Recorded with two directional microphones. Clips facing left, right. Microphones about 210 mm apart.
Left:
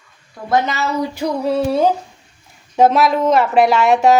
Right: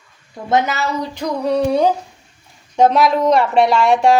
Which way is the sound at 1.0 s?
5° left (ahead or behind).